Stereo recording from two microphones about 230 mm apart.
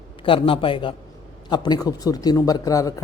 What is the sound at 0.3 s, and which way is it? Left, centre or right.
A man's voice, left.